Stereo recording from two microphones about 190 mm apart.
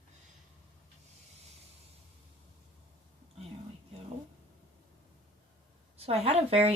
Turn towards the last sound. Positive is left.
turn(degrees=-30)  # may be behind; listen again after turning